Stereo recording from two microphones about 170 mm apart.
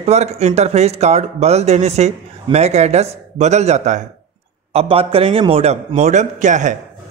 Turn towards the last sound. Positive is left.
turn(degrees=-45)  # may be behind; listen again after turning